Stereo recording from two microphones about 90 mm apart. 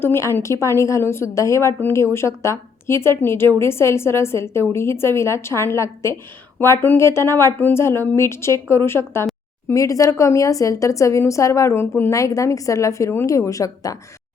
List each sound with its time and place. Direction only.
0.0 s a woman's voice: 30° left (ahead or behind)
9.7 s a woman's voice: 40° left (ahead or behind)
12.1 s a woman's voice: 35° left (ahead or behind)